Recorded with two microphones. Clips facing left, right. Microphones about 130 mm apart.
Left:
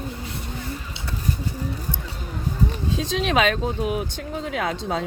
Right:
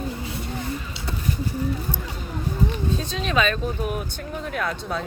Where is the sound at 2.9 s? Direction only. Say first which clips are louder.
Left 4 dB; 90° left.